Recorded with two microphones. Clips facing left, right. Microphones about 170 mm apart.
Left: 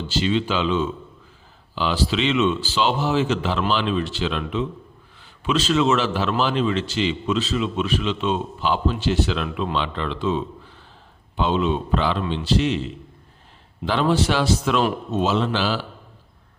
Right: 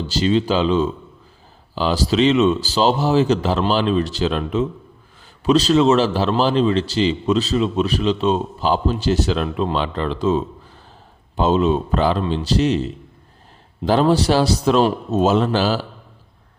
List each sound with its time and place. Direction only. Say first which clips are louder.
0.1 s a man's voice: right 4 dB; 40° right (ahead or behind)